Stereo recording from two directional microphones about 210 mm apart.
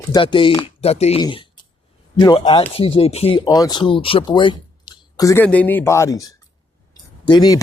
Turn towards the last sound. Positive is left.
turn(degrees=20)  # may be behind; listen again after turning